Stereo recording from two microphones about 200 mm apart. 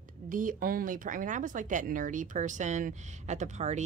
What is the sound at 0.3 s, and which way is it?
Speech, 40° right (ahead or behind).